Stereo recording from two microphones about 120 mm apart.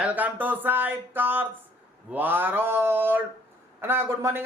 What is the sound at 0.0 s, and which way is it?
Speech, 10° right (ahead or behind).